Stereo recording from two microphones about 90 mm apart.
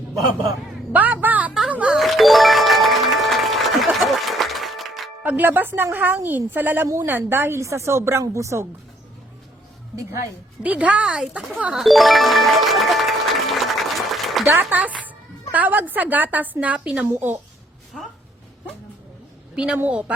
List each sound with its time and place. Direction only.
0.9 s speech: 20° right (ahead or behind)
2.0 s music: centre (ahead or behind)
5.2 s a woman's voice: 20° right (ahead or behind)
9.9 s a woman's voice: 35° right (ahead or behind)
10.6 s speech: 15° right (ahead or behind)
11.7 s music: centre (ahead or behind)
14.7 s a woman's voice: 20° right (ahead or behind)
19.5 s a woman's voice: 10° right (ahead or behind)